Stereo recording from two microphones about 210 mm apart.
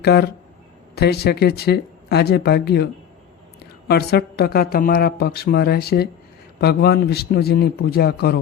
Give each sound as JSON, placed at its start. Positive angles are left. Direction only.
{"t": 0.0, "sound": "speech", "side_deg": 50}